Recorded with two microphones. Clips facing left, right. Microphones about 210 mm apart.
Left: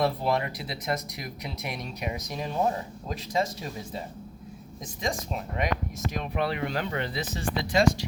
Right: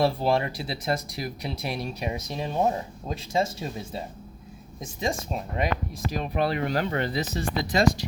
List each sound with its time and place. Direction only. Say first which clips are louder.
0.0 s speech: right 3 dB; 30° right (ahead or behind)